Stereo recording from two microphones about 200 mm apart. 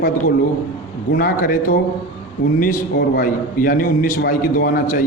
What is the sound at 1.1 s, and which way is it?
Speech, 45° left (ahead or behind).